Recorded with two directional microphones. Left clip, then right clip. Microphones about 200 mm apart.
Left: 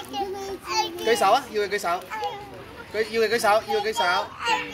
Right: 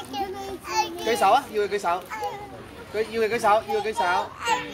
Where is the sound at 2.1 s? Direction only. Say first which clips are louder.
Left 1 dB; 30° left (ahead or behind).